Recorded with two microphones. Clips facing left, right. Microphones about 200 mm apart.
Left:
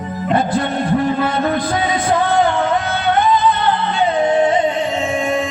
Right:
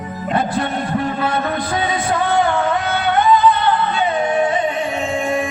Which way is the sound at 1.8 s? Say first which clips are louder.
Left 2 dB; 20° left (ahead or behind).